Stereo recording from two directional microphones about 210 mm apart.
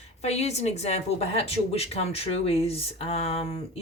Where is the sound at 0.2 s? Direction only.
30° left (ahead or behind).